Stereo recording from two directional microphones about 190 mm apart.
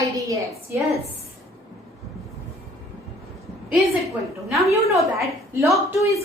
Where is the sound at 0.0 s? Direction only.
15° right (ahead or behind).